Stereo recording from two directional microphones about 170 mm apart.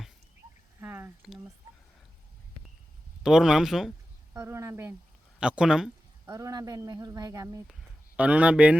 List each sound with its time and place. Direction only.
0.8 s squish: 10° right (ahead or behind)
3.2 s speech: 5° right (ahead or behind)
4.4 s speech: 15° right (ahead or behind)
6.2 s speech: 20° right (ahead or behind)
7.7 s speech: 5° right (ahead or behind)